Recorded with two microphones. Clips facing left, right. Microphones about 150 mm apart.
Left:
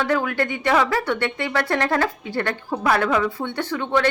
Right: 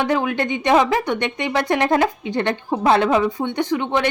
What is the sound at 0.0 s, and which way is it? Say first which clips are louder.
A woman's voice: right 2 dB; 20° right (ahead or behind).